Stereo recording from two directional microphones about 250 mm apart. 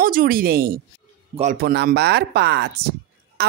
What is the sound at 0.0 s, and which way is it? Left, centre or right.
A woman's voice, right.